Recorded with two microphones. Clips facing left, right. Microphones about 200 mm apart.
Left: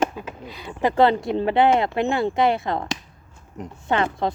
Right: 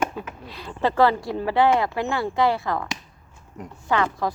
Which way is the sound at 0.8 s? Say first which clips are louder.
Left 2 dB; 20° left (ahead or behind).